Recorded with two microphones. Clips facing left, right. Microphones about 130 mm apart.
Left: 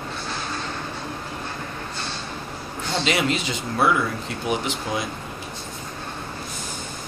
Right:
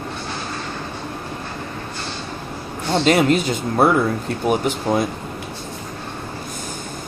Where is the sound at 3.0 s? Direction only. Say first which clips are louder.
Right 8 dB; 45° right (ahead or behind).